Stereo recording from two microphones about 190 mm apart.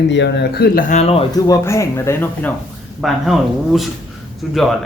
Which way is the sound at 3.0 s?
Centre (ahead or behind).